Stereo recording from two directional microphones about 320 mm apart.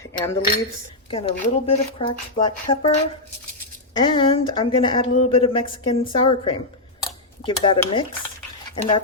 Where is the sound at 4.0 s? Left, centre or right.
Centre.